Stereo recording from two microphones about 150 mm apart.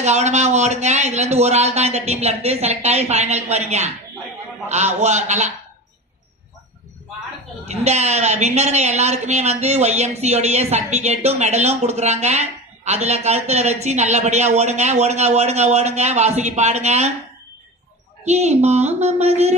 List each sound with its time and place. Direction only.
0.0 s a woman's voice: 50° right (ahead or behind)
7.6 s a woman's voice: 45° right (ahead or behind)
18.2 s a woman's voice: 50° right (ahead or behind)